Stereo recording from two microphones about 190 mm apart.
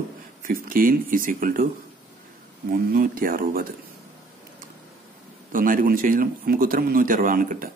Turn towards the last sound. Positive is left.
turn(degrees=-45)  # may be behind; listen again after turning